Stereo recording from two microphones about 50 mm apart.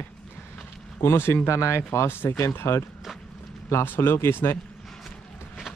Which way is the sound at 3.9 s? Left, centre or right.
Left.